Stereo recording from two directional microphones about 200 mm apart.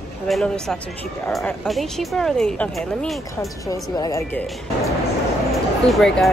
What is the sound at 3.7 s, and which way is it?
Speech, 20° left (ahead or behind).